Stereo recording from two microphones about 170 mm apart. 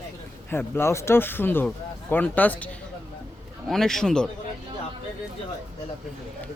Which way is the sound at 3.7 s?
Centre (ahead or behind).